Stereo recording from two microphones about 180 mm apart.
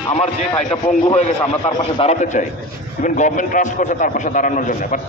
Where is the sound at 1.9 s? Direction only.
40° left (ahead or behind).